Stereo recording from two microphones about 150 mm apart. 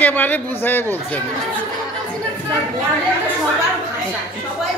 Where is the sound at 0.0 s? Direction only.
10° left (ahead or behind).